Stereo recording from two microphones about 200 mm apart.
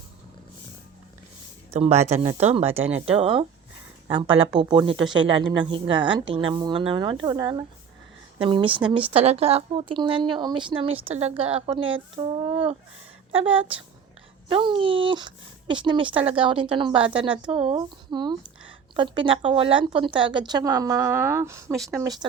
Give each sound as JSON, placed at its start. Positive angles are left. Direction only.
{"t": 1.7, "sound": "a woman's voice", "side_deg": -30}
{"t": 12.1, "sound": "a sound", "side_deg": -25}
{"t": 13.3, "sound": "a woman's voice", "side_deg": -25}